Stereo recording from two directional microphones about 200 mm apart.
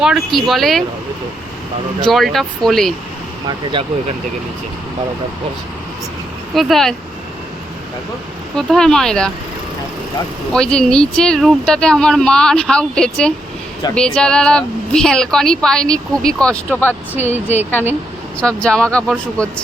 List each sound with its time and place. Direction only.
0.0 s a woman's voice: centre (ahead or behind)
2.0 s a woman's voice: centre (ahead or behind)
6.5 s a woman's voice: centre (ahead or behind)
8.5 s a woman's voice: 5° left (ahead or behind)
10.5 s a woman's voice: 5° left (ahead or behind)
17.2 s speech: 35° left (ahead or behind)
18.3 s a woman's voice: 5° left (ahead or behind)